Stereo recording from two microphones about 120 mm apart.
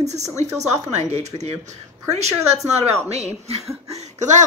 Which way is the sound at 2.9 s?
60° right (ahead or behind).